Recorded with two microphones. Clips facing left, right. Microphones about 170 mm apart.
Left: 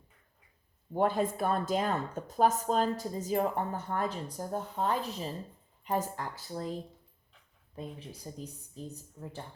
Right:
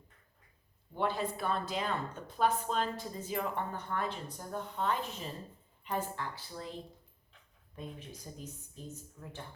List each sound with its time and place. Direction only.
0.9 s speech: 45° left (ahead or behind)
7.8 s speech: 30° left (ahead or behind)